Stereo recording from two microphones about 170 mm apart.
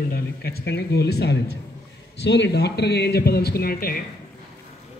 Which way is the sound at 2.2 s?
85° left.